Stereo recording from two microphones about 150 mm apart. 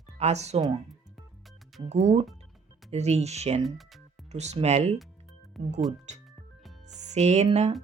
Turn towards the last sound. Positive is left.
turn(degrees=-50)  # may be behind; listen again after turning